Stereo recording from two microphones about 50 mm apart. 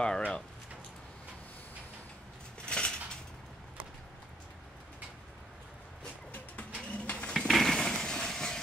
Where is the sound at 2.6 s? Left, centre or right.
Centre.